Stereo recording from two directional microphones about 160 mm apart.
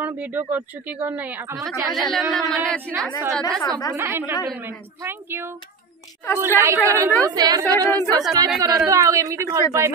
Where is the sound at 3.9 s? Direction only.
15° right (ahead or behind).